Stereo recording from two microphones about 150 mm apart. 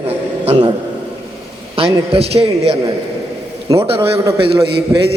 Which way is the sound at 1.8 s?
40° right (ahead or behind).